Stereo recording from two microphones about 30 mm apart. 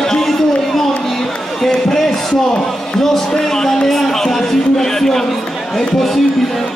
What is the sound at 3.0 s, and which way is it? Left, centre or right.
Music, centre.